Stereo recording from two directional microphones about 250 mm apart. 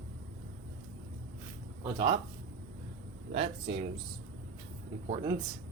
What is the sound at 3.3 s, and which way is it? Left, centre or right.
Speech, right.